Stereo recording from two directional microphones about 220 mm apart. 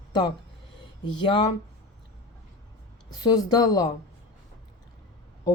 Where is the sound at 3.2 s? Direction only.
20° left (ahead or behind).